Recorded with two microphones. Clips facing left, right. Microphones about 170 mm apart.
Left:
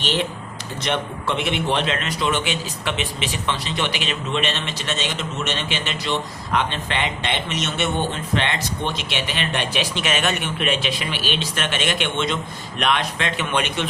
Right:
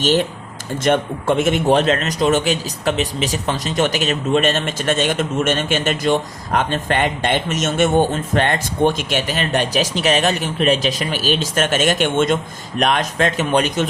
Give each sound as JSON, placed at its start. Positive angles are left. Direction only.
{"t": 0.0, "sound": "a man's voice", "side_deg": -45}